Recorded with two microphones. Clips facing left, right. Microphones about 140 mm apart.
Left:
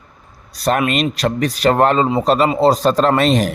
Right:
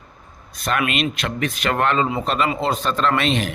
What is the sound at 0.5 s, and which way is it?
Speech, 35° left (ahead or behind).